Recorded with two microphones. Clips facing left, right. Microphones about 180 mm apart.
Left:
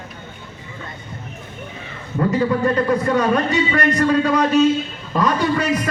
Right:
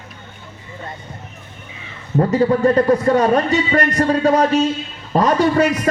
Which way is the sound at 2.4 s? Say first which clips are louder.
Right 5 dB; 35° right (ahead or behind).